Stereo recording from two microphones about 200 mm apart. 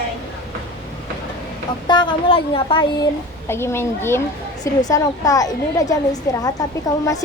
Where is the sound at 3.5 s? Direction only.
10° left (ahead or behind).